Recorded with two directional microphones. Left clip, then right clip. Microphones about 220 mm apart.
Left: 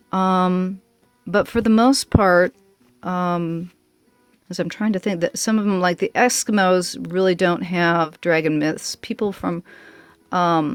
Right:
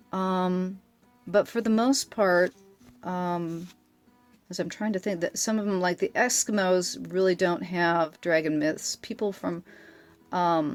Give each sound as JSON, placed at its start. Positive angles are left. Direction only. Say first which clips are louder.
{"t": 0.1, "sound": "speech", "louder": "left 9 dB", "side_deg": 40}